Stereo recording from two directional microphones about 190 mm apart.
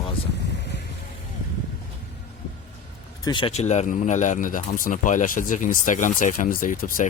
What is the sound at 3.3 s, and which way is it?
Speech, 25° left (ahead or behind).